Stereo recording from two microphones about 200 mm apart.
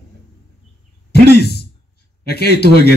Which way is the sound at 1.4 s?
55° left (ahead or behind).